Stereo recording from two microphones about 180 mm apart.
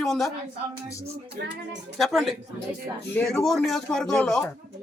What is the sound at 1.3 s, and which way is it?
Speech, 70° right (ahead or behind).